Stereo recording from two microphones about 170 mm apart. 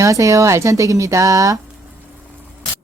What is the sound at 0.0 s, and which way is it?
Speech, 20° right (ahead or behind).